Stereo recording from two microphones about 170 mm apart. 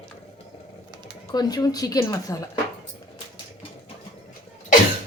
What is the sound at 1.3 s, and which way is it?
A woman's voice, 25° left (ahead or behind).